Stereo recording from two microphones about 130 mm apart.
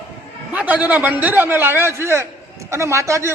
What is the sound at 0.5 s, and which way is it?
A man's voice, 10° right (ahead or behind).